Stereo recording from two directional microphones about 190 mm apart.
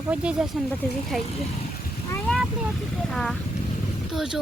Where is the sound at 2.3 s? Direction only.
5° left (ahead or behind).